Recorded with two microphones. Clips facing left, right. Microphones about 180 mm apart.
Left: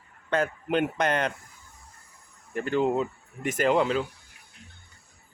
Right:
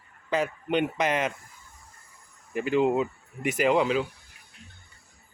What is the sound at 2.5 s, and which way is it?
Speech, 5° right (ahead or behind).